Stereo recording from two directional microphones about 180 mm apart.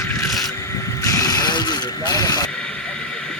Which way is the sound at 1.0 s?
20° left (ahead or behind).